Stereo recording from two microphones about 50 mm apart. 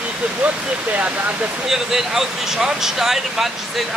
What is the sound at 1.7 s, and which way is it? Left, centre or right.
Speech, centre.